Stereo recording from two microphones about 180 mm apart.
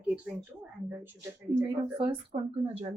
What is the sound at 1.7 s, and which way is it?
Speech, 25° right (ahead or behind).